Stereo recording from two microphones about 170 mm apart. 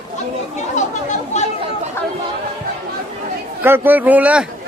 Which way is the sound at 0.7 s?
45° left (ahead or behind).